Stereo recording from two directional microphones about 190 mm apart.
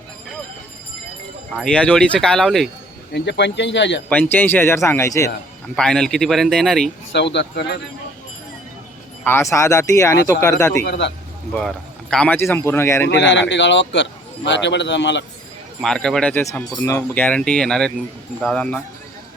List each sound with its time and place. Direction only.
1.5 s speech: 5° left (ahead or behind)
3.1 s speech: 65° left (ahead or behind)
4.1 s speech: 10° left (ahead or behind)
5.7 s speech: 5° left (ahead or behind)
7.1 s speech: 65° left (ahead or behind)
9.2 s speech: 15° left (ahead or behind)
10.8 s speech: 65° left (ahead or behind)
12.1 s speech: 5° left (ahead or behind)
13.1 s a man's voice: 70° left (ahead or behind)
15.8 s speech: 5° left (ahead or behind)